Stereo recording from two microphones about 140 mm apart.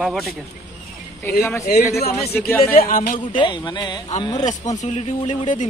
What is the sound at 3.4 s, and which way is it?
Speech, 35° left (ahead or behind).